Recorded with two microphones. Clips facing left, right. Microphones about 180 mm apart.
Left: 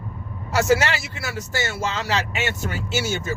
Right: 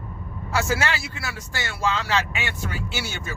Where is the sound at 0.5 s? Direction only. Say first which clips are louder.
Left 5 dB; 40° left (ahead or behind).